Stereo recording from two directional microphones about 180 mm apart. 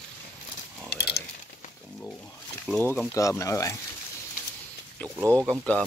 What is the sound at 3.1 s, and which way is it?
Speech, 15° left (ahead or behind).